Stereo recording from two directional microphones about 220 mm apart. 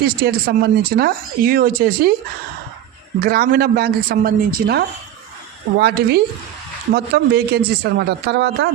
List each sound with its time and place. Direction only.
0.0 s speech: 45° right (ahead or behind)
3.2 s speech: 45° right (ahead or behind)